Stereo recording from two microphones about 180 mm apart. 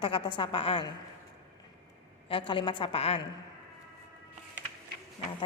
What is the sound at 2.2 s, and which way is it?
A woman's voice, 30° left (ahead or behind).